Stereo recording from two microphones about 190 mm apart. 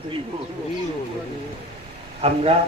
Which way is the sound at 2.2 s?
30° right (ahead or behind).